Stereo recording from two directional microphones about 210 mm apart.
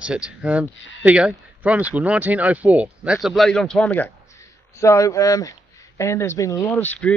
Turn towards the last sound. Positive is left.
turn(degrees=5)  # may be behind; listen again after turning